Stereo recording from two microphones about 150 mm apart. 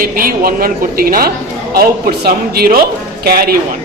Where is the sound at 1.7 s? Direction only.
90° right.